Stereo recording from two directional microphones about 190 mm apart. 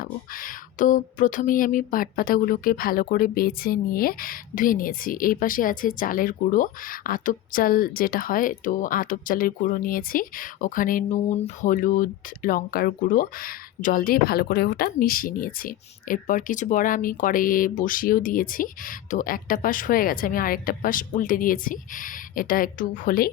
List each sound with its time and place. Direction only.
0.0 s a woman's voice: 45° left (ahead or behind)